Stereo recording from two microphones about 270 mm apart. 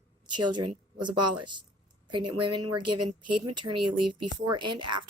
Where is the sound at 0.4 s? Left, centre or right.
Centre.